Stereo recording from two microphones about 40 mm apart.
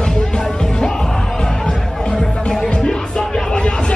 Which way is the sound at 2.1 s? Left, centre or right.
Centre.